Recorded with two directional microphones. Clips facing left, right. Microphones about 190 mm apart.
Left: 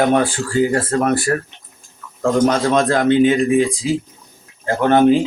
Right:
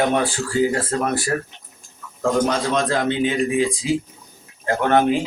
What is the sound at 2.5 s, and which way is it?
Speech, 50° left (ahead or behind).